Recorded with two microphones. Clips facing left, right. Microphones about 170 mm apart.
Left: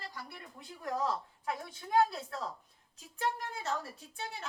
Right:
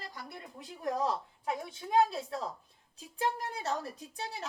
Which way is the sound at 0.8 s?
20° right (ahead or behind).